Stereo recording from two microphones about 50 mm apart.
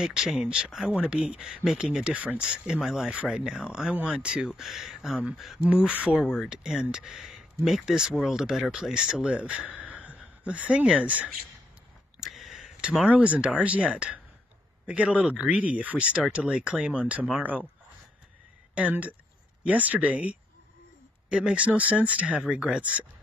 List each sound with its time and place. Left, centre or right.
0.0 s speech: centre
5.6 s speech: right
6.5 s speech: centre
12.2 s a sound: centre
13.0 s speech: right
15.2 s speech: centre
15.5 s speech: right
18.8 s speech: right